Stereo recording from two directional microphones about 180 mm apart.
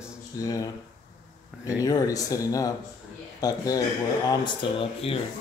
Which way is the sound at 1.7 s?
20° left (ahead or behind).